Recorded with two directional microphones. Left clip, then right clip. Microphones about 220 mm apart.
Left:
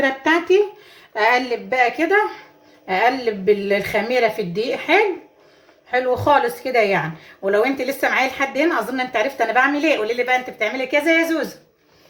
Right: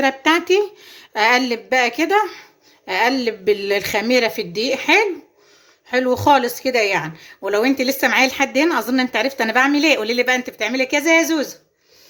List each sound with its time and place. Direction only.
0.0 s speech: 40° right (ahead or behind)